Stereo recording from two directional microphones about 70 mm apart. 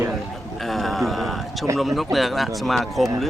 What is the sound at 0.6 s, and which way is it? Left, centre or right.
A man's voice, centre.